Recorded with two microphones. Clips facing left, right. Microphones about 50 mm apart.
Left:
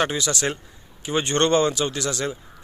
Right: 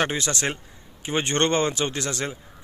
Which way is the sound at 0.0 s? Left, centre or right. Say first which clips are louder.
Left 1 dB; right.